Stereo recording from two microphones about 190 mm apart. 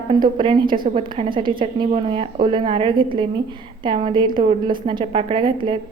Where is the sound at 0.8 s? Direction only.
35° right (ahead or behind).